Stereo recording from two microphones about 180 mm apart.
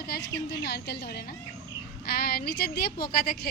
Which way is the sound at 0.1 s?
65° left (ahead or behind).